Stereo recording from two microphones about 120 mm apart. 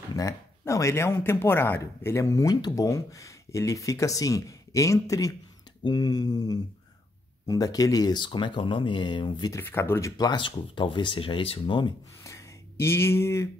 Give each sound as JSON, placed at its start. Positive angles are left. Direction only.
{"t": 0.1, "sound": "speech", "side_deg": 25}
{"t": 9.5, "sound": "speech", "side_deg": 20}
{"t": 10.1, "sound": "speech", "side_deg": 40}
{"t": 12.2, "sound": "a sound", "side_deg": 25}